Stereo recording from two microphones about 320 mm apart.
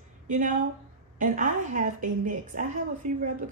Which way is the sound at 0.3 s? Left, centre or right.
Right.